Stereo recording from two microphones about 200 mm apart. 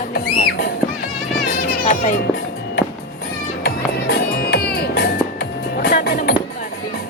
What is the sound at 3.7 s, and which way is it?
Music, 55° left (ahead or behind).